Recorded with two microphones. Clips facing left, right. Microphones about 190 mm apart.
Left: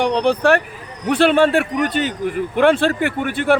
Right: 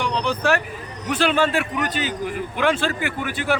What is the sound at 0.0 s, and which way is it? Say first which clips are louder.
A man's voice: left 7 dB; 60° left (ahead or behind).